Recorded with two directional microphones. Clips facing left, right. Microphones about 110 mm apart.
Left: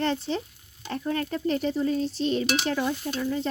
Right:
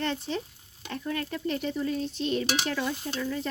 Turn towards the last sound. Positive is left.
turn(degrees=30)  # may be behind; listen again after turning